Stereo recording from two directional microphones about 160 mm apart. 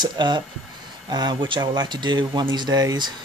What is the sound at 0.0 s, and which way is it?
Speech, 30° right (ahead or behind).